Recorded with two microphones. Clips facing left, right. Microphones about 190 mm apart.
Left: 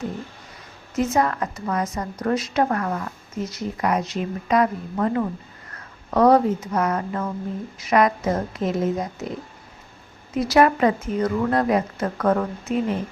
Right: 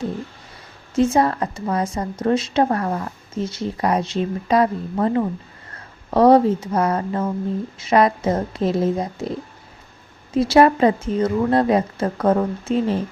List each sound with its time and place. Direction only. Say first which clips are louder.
0.9 s a woman's voice: right 4 dB; 30° right (ahead or behind)
10.3 s a woman's voice: right 3 dB; 30° right (ahead or behind)